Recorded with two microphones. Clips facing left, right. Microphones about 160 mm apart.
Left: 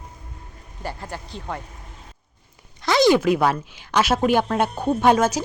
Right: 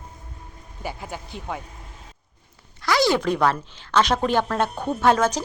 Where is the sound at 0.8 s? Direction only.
Centre (ahead or behind).